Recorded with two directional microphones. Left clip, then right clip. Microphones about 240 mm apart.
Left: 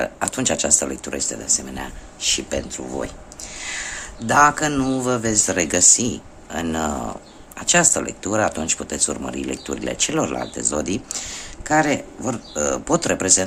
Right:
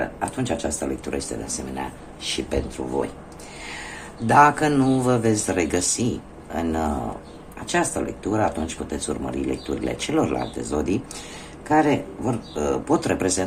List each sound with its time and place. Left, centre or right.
0.2 s speech: left
4.3 s speech: centre